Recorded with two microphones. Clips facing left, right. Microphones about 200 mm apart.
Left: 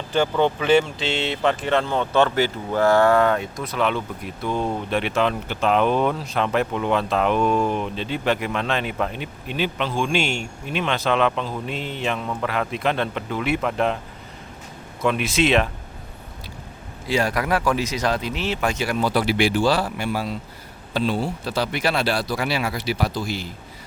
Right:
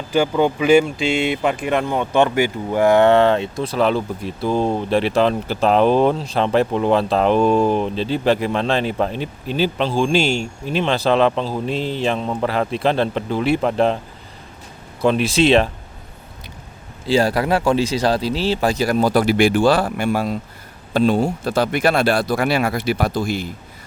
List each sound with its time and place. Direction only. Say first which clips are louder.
0.1 s speech: right 3 dB; 10° right (ahead or behind); by 14.0 s 30° right (ahead or behind)
15.0 s speech: right 5 dB; 30° right (ahead or behind)
17.1 s speech: right 5 dB; 30° right (ahead or behind); by 23.5 s 50° right (ahead or behind)